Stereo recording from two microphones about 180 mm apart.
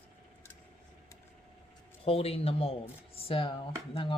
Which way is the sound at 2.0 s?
35° left (ahead or behind).